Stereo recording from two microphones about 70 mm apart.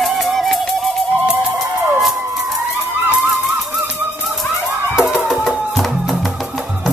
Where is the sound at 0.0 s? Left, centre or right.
Centre.